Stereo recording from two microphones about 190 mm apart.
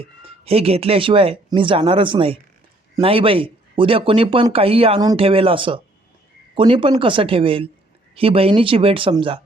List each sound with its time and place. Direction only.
0.0 s speech: 30° right (ahead or behind)